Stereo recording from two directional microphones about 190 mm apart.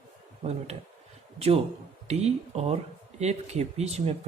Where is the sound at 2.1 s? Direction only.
35° right (ahead or behind).